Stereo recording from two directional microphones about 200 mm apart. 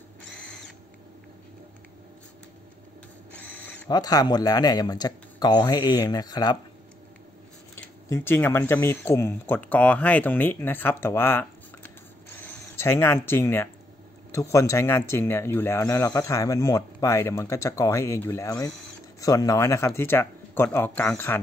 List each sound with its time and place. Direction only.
3.3 s owl: 5° left (ahead or behind)
3.9 s speech: 20° left (ahead or behind)
7.7 s speech: 10° left (ahead or behind)